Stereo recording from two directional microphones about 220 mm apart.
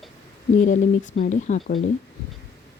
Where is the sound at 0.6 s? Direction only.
35° left (ahead or behind).